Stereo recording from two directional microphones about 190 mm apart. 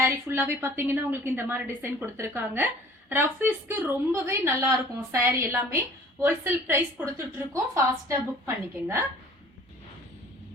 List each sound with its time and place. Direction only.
0.0 s a woman's voice: 10° right (ahead or behind)